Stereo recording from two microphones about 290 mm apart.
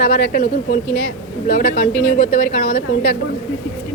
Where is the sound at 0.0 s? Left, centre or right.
Left.